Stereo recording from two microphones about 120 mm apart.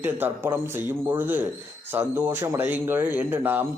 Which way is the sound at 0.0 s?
20° right (ahead or behind).